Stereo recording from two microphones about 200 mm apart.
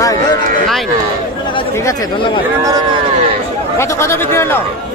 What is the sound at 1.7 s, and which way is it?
Speech, 15° left (ahead or behind).